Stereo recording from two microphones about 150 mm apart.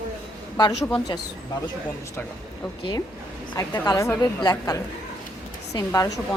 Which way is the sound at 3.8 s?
20° left (ahead or behind).